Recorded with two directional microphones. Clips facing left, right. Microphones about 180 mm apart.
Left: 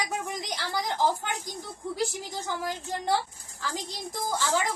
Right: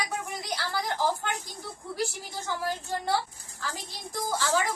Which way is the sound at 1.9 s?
20° left (ahead or behind).